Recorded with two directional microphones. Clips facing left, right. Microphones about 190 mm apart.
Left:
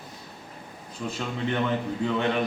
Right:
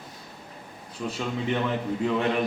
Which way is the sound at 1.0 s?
5° right (ahead or behind).